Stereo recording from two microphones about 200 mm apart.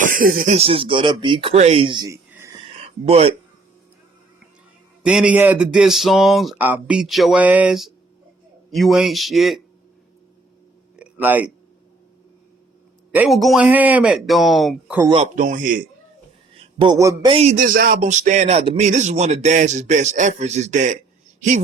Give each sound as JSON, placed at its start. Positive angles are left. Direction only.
{"t": 0.0, "sound": "speech", "side_deg": -45}
{"t": 0.5, "sound": "speech", "side_deg": -30}
{"t": 2.8, "sound": "speech", "side_deg": -30}
{"t": 5.0, "sound": "speech", "side_deg": -5}
{"t": 10.9, "sound": "a sound", "side_deg": -5}
{"t": 13.1, "sound": "speech", "side_deg": 0}
{"t": 15.0, "sound": "speech", "side_deg": -25}
{"t": 15.4, "sound": "speech", "side_deg": -40}
{"t": 16.6, "sound": "a sound", "side_deg": -25}
{"t": 17.3, "sound": "speech", "side_deg": -35}